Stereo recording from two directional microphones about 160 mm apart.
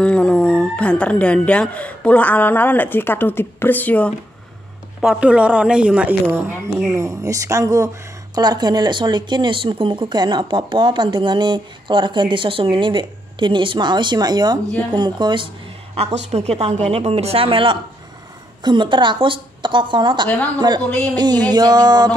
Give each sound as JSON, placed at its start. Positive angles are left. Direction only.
{"t": 0.0, "sound": "speech", "side_deg": 5}
{"t": 5.0, "sound": "a woman's voice", "side_deg": -5}
{"t": 20.2, "sound": "speech", "side_deg": 10}
{"t": 21.1, "sound": "speech", "side_deg": -25}